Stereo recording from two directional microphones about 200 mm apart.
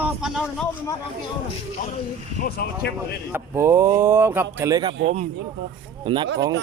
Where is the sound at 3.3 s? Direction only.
15° right (ahead or behind).